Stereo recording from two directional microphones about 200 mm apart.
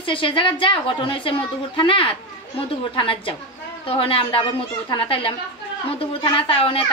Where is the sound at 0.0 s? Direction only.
25° left (ahead or behind).